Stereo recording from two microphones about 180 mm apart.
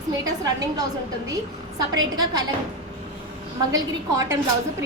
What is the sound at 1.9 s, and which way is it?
Speech, 20° right (ahead or behind).